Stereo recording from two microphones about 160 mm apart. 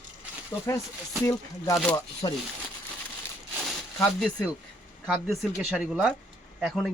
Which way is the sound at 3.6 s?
5° left (ahead or behind).